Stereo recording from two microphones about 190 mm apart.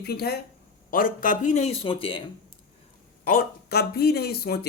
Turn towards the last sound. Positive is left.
turn(degrees=55)  # may be behind; listen again after turning